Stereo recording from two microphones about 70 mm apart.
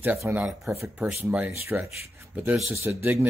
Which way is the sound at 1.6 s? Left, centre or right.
Right.